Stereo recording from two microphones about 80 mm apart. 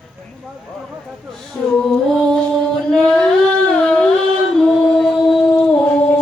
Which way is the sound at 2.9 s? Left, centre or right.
Centre.